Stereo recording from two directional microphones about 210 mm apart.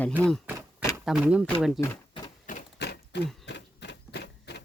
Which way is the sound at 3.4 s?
55° left (ahead or behind).